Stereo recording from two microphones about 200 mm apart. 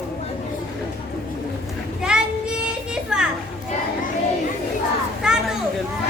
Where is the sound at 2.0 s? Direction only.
5° right (ahead or behind).